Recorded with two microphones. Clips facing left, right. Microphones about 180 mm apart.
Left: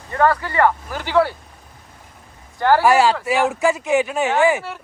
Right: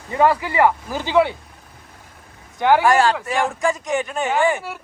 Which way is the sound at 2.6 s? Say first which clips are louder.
Even; 15° right (ahead or behind).